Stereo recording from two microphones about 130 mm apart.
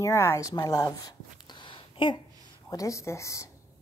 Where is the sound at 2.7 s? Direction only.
25° left (ahead or behind).